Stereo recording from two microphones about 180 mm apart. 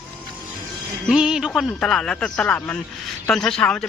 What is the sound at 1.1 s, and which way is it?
Speech, 5° right (ahead or behind).